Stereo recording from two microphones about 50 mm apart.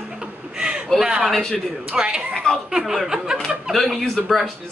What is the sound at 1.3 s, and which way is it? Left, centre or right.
Speech, centre.